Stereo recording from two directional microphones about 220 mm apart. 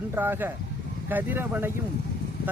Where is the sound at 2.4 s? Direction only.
45° left (ahead or behind).